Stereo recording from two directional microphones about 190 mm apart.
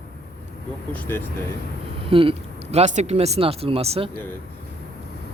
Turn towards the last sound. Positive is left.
turn(degrees=-30)  # may be behind; listen again after turning